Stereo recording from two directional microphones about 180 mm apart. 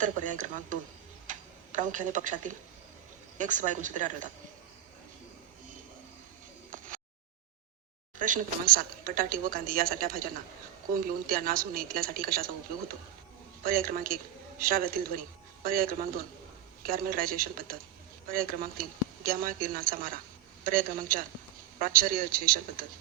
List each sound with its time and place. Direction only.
0.0 s a woman's voice: 45° right (ahead or behind)
6.7 s a sound: 50° right (ahead or behind)
8.2 s a woman's voice: 50° right (ahead or behind)
11.3 s a woman's voice: 55° right (ahead or behind)
13.6 s a woman's voice: 50° right (ahead or behind)